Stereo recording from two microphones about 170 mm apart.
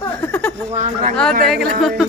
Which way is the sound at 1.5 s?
Centre (ahead or behind).